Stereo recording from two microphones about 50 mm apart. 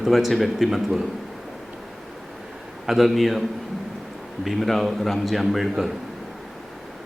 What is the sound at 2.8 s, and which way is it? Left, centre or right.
Speech, centre.